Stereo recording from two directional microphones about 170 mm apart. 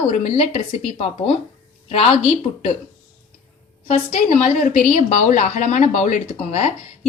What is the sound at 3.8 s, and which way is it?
A woman's voice, 45° left (ahead or behind).